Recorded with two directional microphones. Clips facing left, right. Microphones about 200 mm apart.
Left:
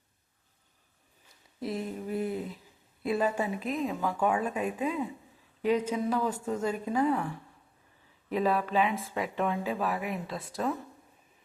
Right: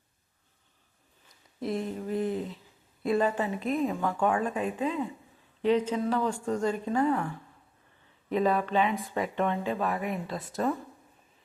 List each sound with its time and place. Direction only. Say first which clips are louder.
1.6 s a sound: right 2 dB; 5° left (ahead or behind)
3.0 s a woman's voice: right 2 dB; 5° left (ahead or behind)
8.3 s speech: right 2 dB; centre (ahead or behind)